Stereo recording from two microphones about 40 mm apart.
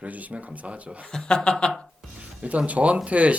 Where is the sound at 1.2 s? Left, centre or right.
Left.